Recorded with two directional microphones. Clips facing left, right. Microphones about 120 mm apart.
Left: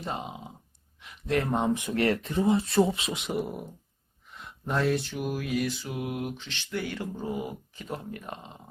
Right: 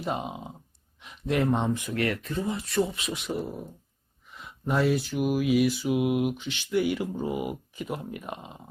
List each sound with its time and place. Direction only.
0.0 s mantra: 15° right (ahead or behind)
0.9 s a sound: 20° right (ahead or behind)
1.4 s speech: centre (ahead or behind)
1.7 s speech: 25° left (ahead or behind)
4.3 s mantra: centre (ahead or behind)